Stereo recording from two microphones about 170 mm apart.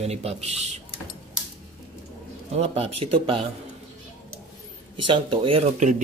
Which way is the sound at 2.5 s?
35° right (ahead or behind).